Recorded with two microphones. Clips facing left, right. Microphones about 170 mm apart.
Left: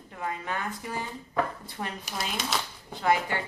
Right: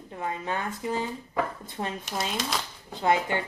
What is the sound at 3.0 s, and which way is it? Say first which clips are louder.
Speech: right 1 dB; 20° right (ahead or behind).